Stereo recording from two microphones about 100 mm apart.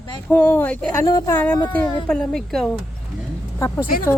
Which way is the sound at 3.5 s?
25° left (ahead or behind).